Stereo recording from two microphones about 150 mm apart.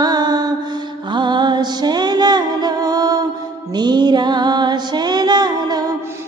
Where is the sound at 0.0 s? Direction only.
25° right (ahead or behind).